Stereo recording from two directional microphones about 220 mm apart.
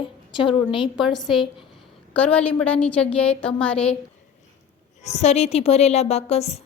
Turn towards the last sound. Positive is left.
turn(degrees=30)  # may be behind; listen again after turning